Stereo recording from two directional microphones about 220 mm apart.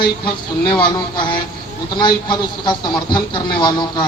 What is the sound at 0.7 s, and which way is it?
Speech, 20° left (ahead or behind).